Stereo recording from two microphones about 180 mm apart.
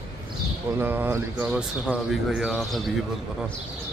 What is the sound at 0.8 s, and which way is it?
Speech, 10° right (ahead or behind).